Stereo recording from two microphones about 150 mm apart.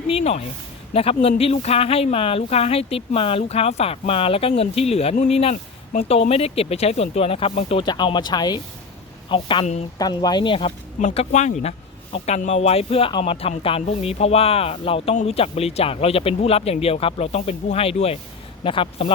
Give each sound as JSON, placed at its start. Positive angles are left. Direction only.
{"t": 0.1, "sound": "speech", "side_deg": 45}